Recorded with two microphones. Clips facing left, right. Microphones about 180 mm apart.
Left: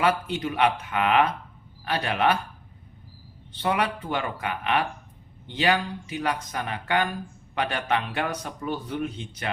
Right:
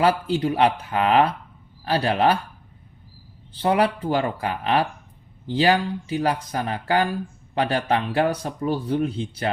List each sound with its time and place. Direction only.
0.0 s speech: 30° right (ahead or behind)
3.6 s speech: 30° right (ahead or behind)